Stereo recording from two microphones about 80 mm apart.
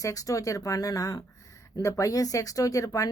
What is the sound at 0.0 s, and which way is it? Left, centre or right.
A woman's voice, left.